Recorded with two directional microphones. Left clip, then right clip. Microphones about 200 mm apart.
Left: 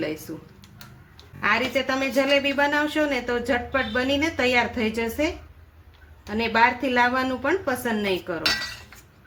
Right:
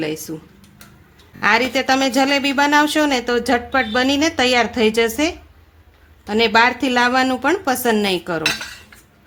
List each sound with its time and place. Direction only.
0.3 s speech: 45° right (ahead or behind)
1.4 s a woman's voice: 60° right (ahead or behind)